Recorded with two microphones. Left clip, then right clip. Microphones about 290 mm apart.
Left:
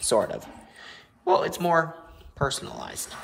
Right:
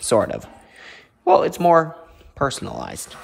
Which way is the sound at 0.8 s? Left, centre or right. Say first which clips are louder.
Right 7 dB; centre.